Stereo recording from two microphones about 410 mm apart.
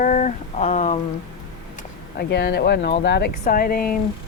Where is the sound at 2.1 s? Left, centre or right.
Left.